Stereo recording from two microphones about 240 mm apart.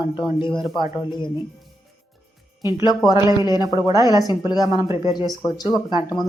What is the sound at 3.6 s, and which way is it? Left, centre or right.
Speech, centre.